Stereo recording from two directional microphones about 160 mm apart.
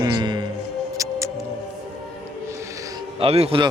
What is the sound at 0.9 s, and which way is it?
Music, 20° right (ahead or behind).